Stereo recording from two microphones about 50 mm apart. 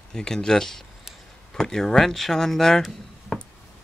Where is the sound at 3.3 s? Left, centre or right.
Centre.